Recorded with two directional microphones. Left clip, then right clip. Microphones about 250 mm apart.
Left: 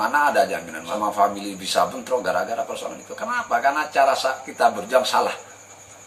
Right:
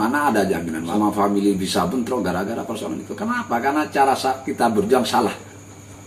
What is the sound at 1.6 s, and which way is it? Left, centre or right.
Speech, centre.